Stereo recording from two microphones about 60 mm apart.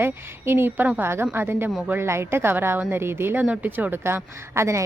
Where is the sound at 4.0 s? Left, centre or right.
Right.